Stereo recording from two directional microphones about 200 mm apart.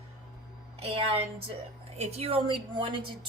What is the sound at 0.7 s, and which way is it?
A woman's voice, 30° right (ahead or behind).